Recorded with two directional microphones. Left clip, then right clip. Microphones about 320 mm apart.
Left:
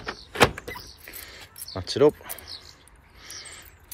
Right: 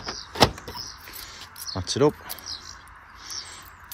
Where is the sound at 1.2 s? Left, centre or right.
Centre.